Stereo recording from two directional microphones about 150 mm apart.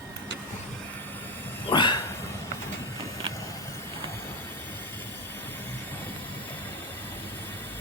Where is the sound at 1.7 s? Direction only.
30° left (ahead or behind).